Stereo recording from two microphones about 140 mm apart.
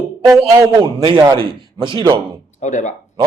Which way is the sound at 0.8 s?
30° right (ahead or behind).